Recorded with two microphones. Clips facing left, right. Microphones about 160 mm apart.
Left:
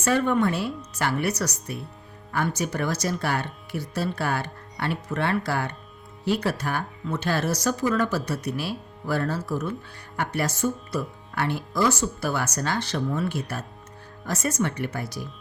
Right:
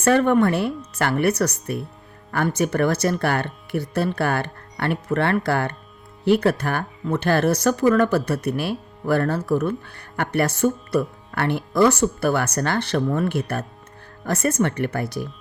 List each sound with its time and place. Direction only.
0.0 s speech: 60° right (ahead or behind)